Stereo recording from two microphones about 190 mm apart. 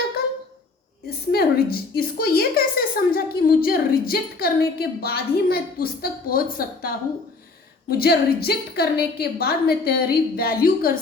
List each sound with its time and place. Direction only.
1.3 s a woman's voice: 55° left (ahead or behind)